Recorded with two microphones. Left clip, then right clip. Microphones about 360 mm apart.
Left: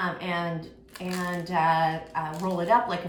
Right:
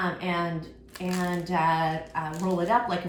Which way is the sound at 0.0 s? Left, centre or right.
Centre.